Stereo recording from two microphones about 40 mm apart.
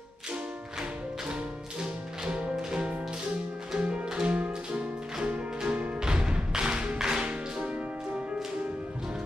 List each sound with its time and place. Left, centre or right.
2.5 s music: centre; by 5.9 s right
5.9 s music: centre